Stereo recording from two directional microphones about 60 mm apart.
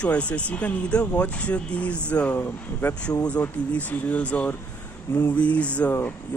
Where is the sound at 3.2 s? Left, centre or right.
Left.